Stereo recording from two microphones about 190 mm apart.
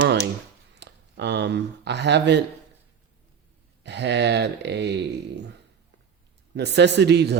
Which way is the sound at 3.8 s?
65° right (ahead or behind).